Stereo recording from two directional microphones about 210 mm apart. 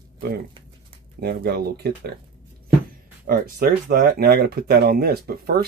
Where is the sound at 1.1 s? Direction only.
50° right (ahead or behind).